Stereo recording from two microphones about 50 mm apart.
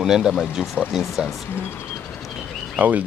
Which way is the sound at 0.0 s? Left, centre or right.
Centre.